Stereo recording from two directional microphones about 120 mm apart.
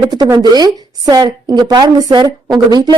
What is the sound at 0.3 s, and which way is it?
A woman's voice, 35° right (ahead or behind).